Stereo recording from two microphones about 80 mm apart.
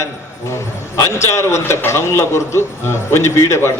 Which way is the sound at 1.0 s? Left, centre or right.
Left.